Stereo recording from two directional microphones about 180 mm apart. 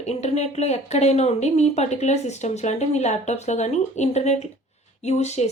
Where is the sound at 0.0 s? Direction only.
40° left (ahead or behind).